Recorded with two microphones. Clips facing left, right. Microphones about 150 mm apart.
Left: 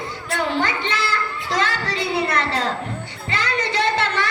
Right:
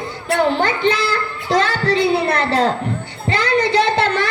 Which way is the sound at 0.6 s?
30° right (ahead or behind).